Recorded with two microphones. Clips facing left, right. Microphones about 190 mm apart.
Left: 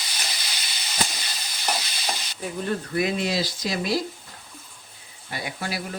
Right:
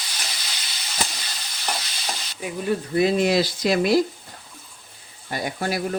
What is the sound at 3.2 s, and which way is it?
Speech, 55° right (ahead or behind).